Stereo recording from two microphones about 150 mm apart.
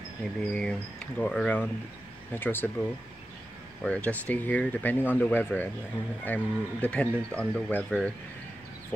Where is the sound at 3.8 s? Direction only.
10° left (ahead or behind).